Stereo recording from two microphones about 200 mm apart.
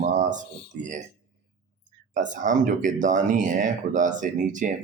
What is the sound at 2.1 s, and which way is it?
Speech, 40° right (ahead or behind).